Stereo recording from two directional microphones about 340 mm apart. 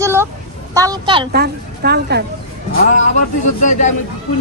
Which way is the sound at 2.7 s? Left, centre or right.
Left.